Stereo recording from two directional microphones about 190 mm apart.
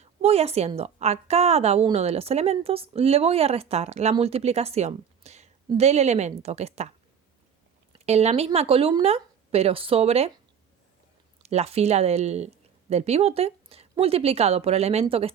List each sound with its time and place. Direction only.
0.0 s a woman's voice: 35° right (ahead or behind)
7.9 s a woman's voice: 35° right (ahead or behind)
11.4 s a woman's voice: 35° right (ahead or behind)